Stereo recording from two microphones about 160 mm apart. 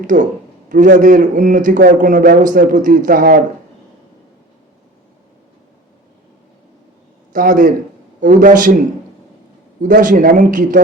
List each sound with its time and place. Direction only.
0.1 s a man's voice: 55° right (ahead or behind)
7.3 s a man's voice: 55° right (ahead or behind)
9.8 s a man's voice: 55° right (ahead or behind)